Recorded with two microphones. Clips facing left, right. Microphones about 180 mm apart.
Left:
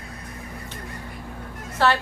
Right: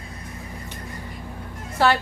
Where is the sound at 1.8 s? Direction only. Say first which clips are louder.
Right 1 dB; 10° right (ahead or behind).